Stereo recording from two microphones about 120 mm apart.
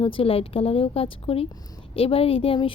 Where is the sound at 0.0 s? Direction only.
50° left (ahead or behind).